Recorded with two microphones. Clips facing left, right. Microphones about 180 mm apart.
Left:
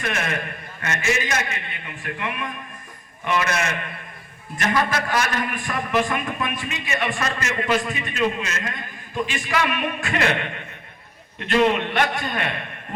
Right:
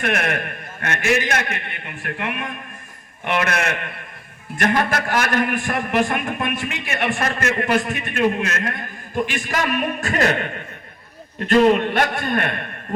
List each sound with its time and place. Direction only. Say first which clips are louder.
0.0 s a man's voice: right 4 dB; 60° right (ahead or behind)
9.3 s a man's voice: right 1 dB; 45° right (ahead or behind)